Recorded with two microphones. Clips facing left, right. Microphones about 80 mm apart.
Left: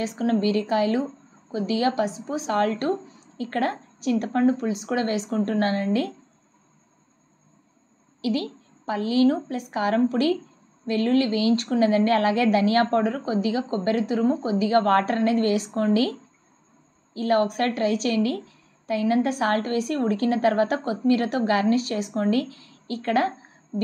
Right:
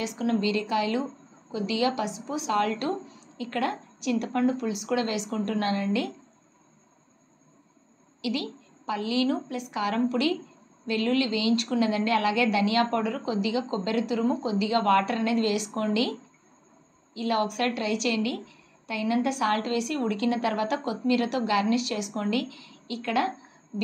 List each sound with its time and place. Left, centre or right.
0.0 s a woman's voice: left
8.2 s a woman's voice: left